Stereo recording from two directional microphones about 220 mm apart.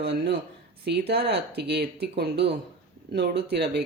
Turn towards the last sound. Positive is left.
turn(degrees=-45)  # may be behind; listen again after turning